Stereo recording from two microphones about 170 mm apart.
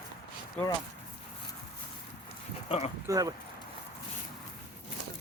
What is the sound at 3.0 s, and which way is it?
Speech, 20° right (ahead or behind).